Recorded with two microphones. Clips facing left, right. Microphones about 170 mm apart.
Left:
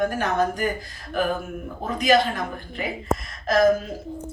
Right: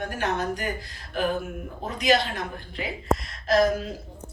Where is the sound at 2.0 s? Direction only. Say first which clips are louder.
Left 3 dB; 45° left (ahead or behind).